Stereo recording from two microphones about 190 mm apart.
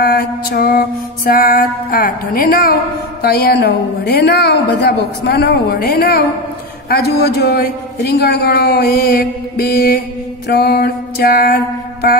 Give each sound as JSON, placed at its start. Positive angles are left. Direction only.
{"t": 0.0, "sound": "mantra", "side_deg": 55}
{"t": 1.3, "sound": "a woman's voice", "side_deg": 50}
{"t": 10.5, "sound": "mantra", "side_deg": 55}